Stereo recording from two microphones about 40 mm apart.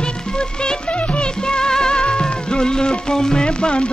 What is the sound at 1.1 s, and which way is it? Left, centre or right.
Music of bollywood, left.